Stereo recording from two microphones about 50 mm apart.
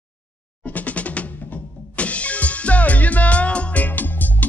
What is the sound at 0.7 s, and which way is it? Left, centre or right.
Drum, left.